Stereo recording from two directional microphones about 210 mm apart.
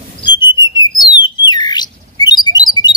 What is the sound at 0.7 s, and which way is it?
Bird, 20° left (ahead or behind).